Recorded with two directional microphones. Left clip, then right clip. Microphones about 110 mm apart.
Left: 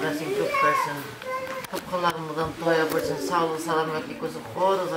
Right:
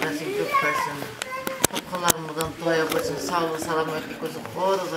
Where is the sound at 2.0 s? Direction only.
Centre (ahead or behind).